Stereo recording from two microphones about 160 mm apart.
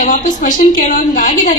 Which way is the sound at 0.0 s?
55° left (ahead or behind).